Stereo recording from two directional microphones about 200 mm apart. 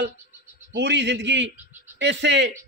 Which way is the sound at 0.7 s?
60° right (ahead or behind).